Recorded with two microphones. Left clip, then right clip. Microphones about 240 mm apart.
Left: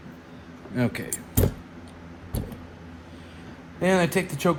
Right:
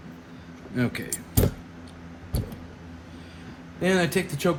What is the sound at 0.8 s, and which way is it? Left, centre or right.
Speech, left.